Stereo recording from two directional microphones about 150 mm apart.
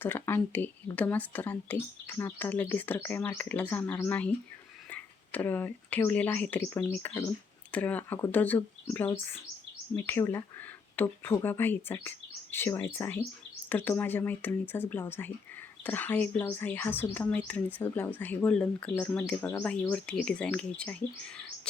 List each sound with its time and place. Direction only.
0.0 s speech: 15° left (ahead or behind)